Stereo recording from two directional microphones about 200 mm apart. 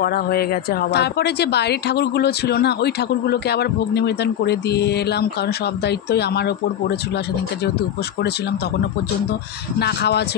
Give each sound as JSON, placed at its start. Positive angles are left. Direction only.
{"t": 0.0, "sound": "a woman's voice", "side_deg": 50}
{"t": 9.8, "sound": "a woman's voice", "side_deg": 55}